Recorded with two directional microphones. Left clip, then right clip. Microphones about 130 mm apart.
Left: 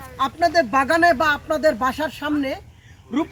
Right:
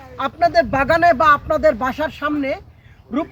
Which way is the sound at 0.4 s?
90° right.